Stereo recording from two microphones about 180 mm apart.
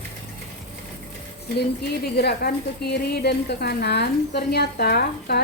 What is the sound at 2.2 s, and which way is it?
A woman's voice, 65° left (ahead or behind).